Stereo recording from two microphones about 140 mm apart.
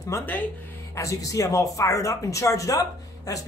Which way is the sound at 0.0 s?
15° left (ahead or behind).